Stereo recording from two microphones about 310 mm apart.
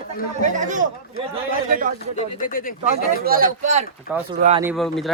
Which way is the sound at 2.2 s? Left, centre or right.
Left.